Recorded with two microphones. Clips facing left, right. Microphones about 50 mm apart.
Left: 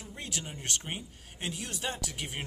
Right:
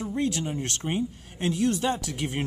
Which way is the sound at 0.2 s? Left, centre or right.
Centre.